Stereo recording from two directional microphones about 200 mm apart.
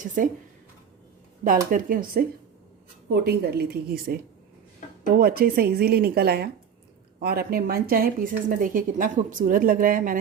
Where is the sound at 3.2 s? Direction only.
50° right (ahead or behind).